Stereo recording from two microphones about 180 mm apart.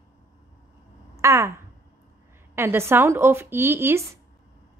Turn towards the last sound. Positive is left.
turn(degrees=-15)  # may be behind; listen again after turning